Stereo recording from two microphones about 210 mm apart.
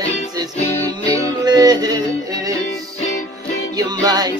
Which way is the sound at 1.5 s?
20° right (ahead or behind).